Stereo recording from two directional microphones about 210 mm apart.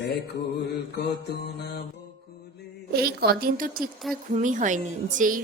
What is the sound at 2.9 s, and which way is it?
A woman's voice, 50° right (ahead or behind).